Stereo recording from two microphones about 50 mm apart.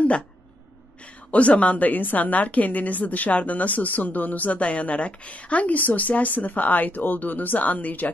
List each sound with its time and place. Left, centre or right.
1.3 s a woman's voice: left